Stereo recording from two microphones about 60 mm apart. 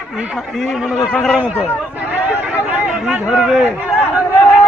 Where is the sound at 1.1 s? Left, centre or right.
Centre.